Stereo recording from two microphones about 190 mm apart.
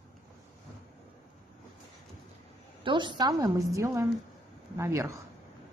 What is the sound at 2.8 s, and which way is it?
A woman's voice, 25° right (ahead or behind).